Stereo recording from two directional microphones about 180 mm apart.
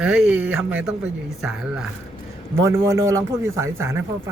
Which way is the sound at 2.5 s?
15° right (ahead or behind).